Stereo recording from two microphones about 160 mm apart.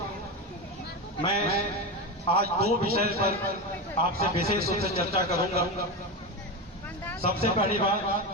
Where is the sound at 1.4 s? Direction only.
75° right (ahead or behind).